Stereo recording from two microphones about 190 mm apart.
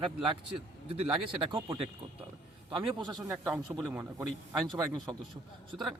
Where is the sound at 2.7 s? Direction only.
25° right (ahead or behind).